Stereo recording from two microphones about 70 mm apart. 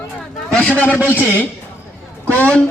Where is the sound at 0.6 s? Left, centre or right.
Left.